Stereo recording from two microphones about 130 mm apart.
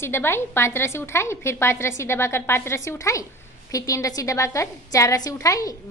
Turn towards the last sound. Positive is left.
turn(degrees=25)  # may be behind; listen again after turning